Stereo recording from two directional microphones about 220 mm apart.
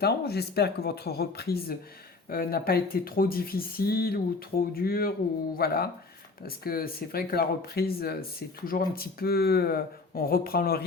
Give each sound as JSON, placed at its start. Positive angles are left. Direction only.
{"t": 0.0, "sound": "speech", "side_deg": 45}